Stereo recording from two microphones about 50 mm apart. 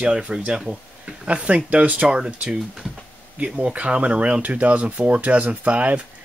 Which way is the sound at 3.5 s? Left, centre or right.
Right.